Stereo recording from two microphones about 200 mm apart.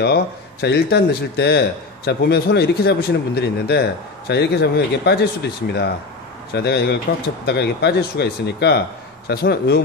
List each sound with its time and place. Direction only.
0.0 s a man's voice: 55° left (ahead or behind)